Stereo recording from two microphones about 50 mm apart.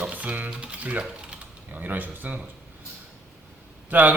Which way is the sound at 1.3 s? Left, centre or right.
Right.